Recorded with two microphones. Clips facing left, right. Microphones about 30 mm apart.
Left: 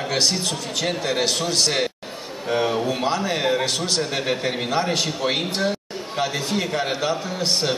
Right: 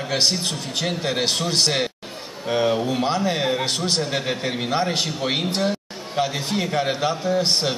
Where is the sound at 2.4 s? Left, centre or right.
Centre.